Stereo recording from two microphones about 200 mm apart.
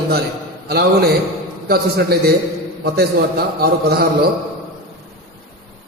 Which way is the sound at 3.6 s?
50° right (ahead or behind).